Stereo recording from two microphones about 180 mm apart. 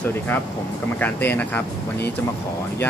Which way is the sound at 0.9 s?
10° left (ahead or behind).